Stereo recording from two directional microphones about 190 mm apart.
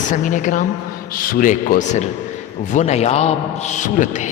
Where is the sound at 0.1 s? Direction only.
40° left (ahead or behind).